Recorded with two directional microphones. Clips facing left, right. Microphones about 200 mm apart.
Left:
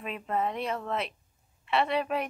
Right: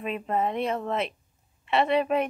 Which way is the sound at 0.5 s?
25° right (ahead or behind).